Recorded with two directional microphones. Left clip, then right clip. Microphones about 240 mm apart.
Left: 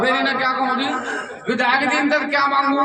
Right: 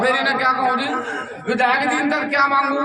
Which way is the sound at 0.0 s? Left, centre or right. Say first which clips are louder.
Right 1 dB; centre.